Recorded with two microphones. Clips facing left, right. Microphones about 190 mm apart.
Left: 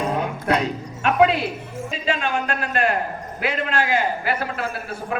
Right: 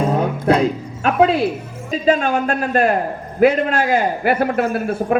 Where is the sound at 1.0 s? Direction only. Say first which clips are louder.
Right 3 dB; 35° right (ahead or behind).